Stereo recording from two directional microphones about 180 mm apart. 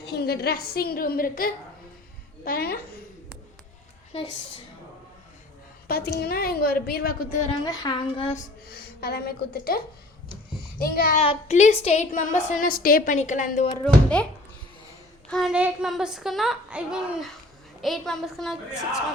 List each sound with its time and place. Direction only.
0.0 s a woman's voice: 65° left (ahead or behind)
5.9 s a woman's voice: 55° left (ahead or behind)
7.5 s a woman's voice: 25° left (ahead or behind)
9.0 s a woman's voice: 60° left (ahead or behind)
11.2 s a woman's voice: 35° left (ahead or behind)
13.8 s speech: 5° left (ahead or behind)
15.3 s a woman's voice: centre (ahead or behind)